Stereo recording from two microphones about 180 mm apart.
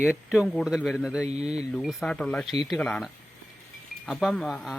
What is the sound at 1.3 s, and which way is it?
Speech, 35° right (ahead or behind).